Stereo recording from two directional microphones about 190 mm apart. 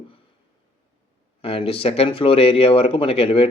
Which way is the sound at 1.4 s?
30° left (ahead or behind).